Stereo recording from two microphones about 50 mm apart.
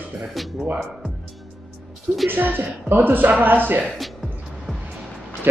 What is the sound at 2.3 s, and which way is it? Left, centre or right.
A man's voice, right.